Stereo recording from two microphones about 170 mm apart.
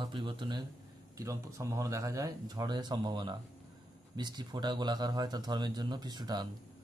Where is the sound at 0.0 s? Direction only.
30° right (ahead or behind).